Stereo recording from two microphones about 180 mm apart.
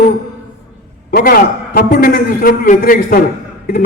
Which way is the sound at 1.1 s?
55° left (ahead or behind).